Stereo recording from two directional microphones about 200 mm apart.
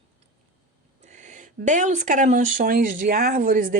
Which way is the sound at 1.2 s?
40° right (ahead or behind).